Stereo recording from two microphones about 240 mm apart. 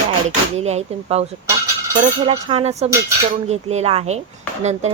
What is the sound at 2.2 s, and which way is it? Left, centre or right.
Speech, right.